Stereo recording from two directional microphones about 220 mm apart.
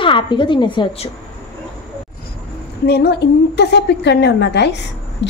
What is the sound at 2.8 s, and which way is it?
A woman's voice, 45° left (ahead or behind).